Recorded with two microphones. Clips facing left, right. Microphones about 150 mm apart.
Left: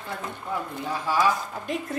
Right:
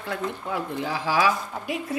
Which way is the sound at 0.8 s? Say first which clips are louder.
Right 1 dB; 90° right.